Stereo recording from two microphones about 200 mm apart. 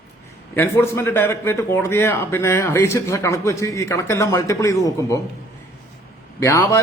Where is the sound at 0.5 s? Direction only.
10° left (ahead or behind).